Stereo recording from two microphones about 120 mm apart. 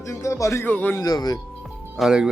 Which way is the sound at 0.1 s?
25° left (ahead or behind).